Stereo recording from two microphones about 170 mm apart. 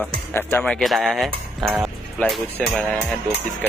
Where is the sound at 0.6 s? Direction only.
Centre (ahead or behind).